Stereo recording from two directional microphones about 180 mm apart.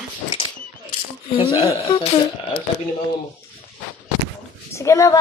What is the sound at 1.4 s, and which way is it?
Speech, 30° left (ahead or behind).